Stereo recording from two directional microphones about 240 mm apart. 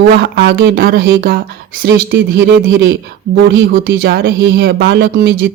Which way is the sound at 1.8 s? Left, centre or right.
Right.